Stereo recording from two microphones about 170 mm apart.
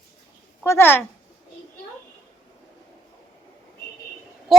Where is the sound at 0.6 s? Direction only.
15° left (ahead or behind).